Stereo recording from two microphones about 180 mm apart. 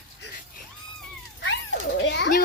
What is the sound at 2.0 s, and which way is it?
Speech, 75° left (ahead or behind).